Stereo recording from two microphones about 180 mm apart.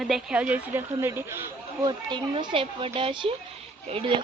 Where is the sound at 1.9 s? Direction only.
25° right (ahead or behind).